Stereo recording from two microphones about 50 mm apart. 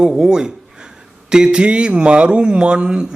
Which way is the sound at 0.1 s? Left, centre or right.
Centre.